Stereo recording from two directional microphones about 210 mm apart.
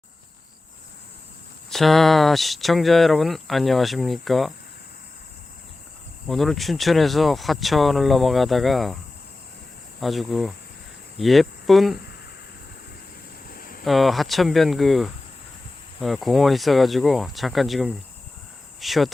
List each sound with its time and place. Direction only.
1.7 s speech: centre (ahead or behind)
6.2 s speech: centre (ahead or behind)
10.0 s speech: centre (ahead or behind)
13.5 s a sound: 45° left (ahead or behind)
13.8 s speech: centre (ahead or behind)